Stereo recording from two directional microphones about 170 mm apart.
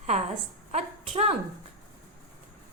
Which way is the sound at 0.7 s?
35° right (ahead or behind).